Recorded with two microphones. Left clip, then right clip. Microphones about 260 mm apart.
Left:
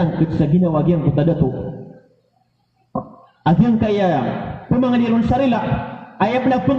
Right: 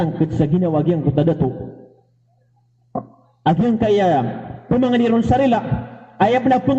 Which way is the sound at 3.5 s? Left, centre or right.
Right.